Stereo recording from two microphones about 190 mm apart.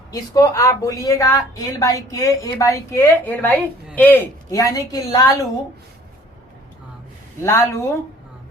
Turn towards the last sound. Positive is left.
turn(degrees=15)  # may be behind; listen again after turning